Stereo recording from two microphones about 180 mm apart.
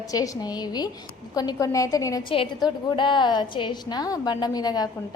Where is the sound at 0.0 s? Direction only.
20° left (ahead or behind).